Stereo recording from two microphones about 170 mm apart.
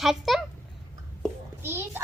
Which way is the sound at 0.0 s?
Centre (ahead or behind).